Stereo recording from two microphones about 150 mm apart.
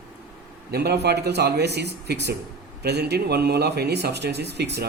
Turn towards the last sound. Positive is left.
turn(degrees=-90)